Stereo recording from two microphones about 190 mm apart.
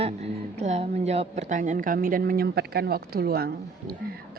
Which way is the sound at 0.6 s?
35° right (ahead or behind).